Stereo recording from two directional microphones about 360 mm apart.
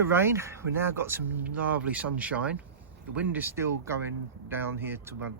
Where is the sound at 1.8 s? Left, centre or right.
Centre.